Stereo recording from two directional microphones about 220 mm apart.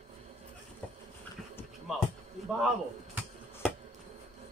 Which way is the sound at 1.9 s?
Centre (ahead or behind).